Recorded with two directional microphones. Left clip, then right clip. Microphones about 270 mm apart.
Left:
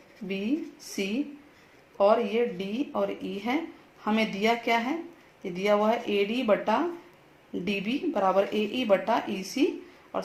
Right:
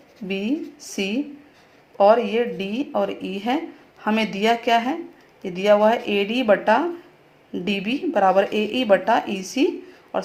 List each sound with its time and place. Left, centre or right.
0.3 s speech: right